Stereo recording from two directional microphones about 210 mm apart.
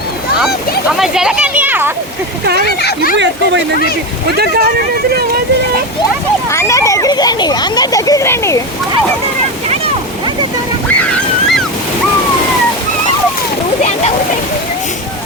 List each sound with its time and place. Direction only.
0.4 s speech: centre (ahead or behind)
2.8 s speech: 45° left (ahead or behind)
4.4 s speech: 45° right (ahead or behind)
6.5 s a child's voice: 15° left (ahead or behind)